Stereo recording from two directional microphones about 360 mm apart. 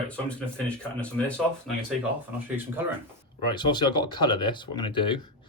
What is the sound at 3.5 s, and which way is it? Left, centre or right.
Speech, centre.